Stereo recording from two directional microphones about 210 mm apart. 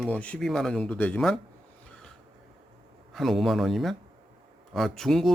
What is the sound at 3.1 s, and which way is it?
Speech, centre (ahead or behind).